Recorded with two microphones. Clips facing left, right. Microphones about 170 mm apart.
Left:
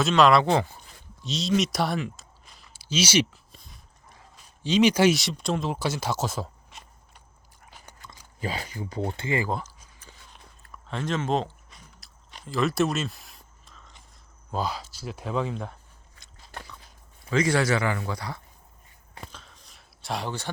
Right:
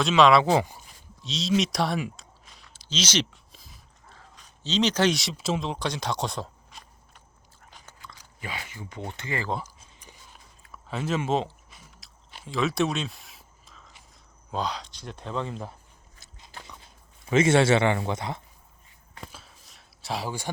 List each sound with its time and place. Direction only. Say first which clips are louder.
0.0 s speech: even; centre (ahead or behind)
2.1 s a sound: right 1 dB; centre (ahead or behind)
4.1 s speech: right 1 dB; 10° left (ahead or behind)
7.6 s dog: left 1 dB; 10° left (ahead or behind)
7.9 s speech: even; 50° left (ahead or behind); by 9.4 s 30° left (ahead or behind)
10.6 s biting: even; 5° right (ahead or behind)
14.5 s speech: left 1 dB; 5° left (ahead or behind)
17.2 s a man's voice: right 4 dB; 25° right (ahead or behind)
19.3 s a sound: left 1 dB; 5° right (ahead or behind)